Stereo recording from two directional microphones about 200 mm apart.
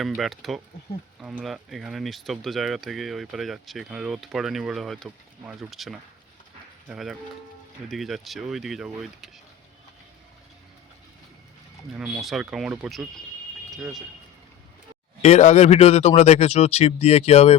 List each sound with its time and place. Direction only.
0.0 s speech: centre (ahead or behind)
11.9 s speech: 5° right (ahead or behind)
15.2 s speech: 35° left (ahead or behind)